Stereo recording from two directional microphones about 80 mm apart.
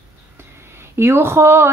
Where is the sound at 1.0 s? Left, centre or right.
Right.